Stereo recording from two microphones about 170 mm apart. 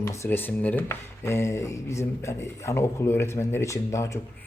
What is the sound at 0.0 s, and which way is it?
Speech, 15° left (ahead or behind).